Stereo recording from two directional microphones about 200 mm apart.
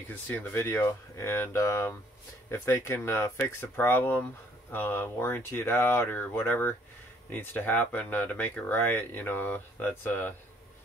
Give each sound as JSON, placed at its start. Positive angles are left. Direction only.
{"t": 0.1, "sound": "speech", "side_deg": 10}